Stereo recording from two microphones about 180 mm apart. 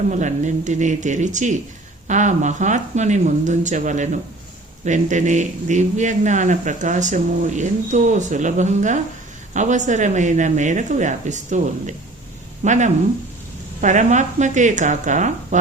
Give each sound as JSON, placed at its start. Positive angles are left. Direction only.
{"t": 0.1, "sound": "a man's voice", "side_deg": -40}